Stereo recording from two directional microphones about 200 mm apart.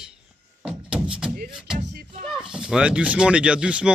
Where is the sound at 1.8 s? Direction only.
35° right (ahead or behind).